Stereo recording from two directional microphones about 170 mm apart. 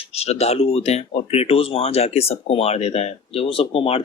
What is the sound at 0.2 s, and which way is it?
Speech, 40° left (ahead or behind).